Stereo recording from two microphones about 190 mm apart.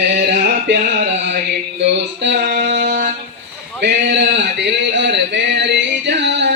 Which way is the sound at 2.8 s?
40° right (ahead or behind).